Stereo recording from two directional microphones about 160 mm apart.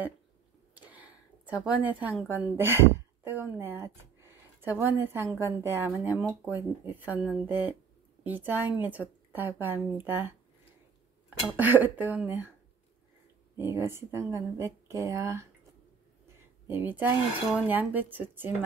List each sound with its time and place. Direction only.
0.7 s a sound: 10° right (ahead or behind)
2.3 s speech: 15° right (ahead or behind)
11.4 s speech: 10° right (ahead or behind)
13.6 s speech: 15° right (ahead or behind)
16.6 s speech: 10° right (ahead or behind)